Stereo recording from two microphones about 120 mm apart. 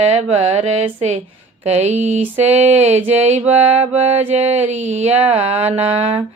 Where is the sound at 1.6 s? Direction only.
65° right (ahead or behind).